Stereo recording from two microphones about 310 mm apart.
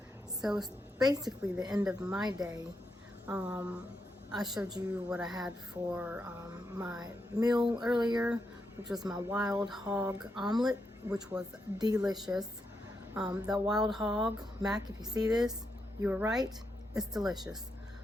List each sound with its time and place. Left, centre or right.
0.4 s speech: centre
0.9 s a woman's voice: centre
4.7 s a woman's voice: centre
12.1 s a woman's voice: centre
15.3 s a woman's voice: centre